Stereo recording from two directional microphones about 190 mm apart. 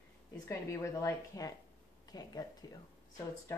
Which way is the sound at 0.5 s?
15° left (ahead or behind).